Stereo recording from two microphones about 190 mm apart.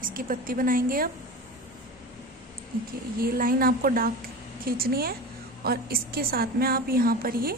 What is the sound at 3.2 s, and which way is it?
A woman's voice, 50° right (ahead or behind).